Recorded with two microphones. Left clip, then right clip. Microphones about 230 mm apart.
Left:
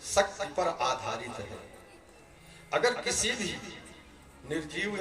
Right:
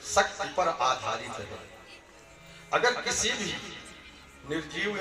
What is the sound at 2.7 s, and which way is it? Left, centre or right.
A man's voice, right.